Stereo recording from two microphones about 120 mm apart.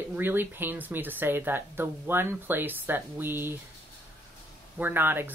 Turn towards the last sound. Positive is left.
turn(degrees=-20)  # may be behind; listen again after turning